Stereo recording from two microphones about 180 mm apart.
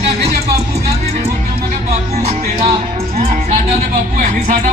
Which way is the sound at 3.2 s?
40° right (ahead or behind).